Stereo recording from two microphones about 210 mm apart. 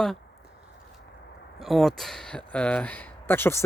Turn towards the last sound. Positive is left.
turn(degrees=10)  # may be behind; listen again after turning